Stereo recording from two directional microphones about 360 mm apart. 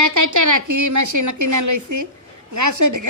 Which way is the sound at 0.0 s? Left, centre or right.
Right.